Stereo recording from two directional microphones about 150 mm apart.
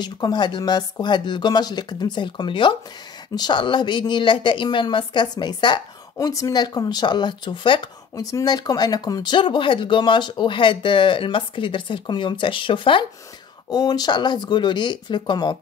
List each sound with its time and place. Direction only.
0.0 s a woman's voice: 30° left (ahead or behind)